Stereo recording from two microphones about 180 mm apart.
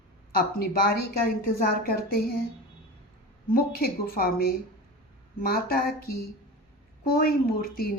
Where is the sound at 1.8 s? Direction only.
60° left (ahead or behind).